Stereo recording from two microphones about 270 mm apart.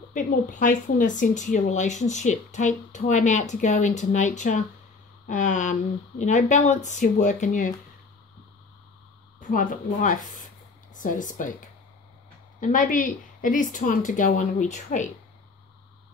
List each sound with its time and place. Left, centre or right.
0.1 s speech: left
9.4 s speech: left
12.5 s speech: left